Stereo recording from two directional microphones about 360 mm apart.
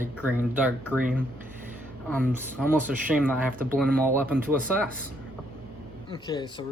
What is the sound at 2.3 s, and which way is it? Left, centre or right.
Speech, centre.